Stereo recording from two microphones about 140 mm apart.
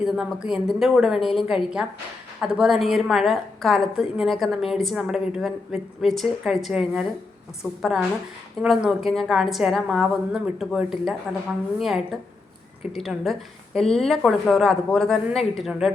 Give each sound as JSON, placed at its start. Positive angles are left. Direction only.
{"t": 0.0, "sound": "a woman's voice", "side_deg": -5}